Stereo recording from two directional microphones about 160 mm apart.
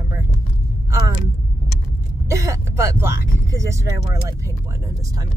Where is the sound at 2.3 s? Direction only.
20° right (ahead or behind).